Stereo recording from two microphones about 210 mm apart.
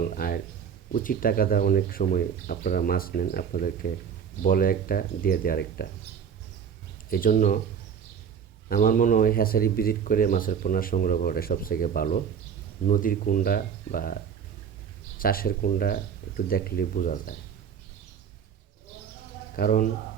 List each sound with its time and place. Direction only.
0.2 s speech: 45° left (ahead or behind)
7.1 s speech: 40° left (ahead or behind)
8.7 s speech: 40° left (ahead or behind)
15.2 s speech: 45° left (ahead or behind)
19.5 s speech: 40° left (ahead or behind)